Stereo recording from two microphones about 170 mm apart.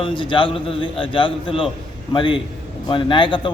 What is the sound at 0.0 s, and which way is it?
Speech, 30° left (ahead or behind).